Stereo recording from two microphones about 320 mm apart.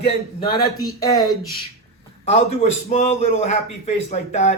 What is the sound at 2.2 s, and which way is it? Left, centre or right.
A man's voice, centre.